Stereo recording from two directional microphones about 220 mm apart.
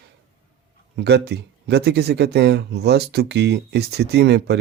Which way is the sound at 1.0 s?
50° right (ahead or behind).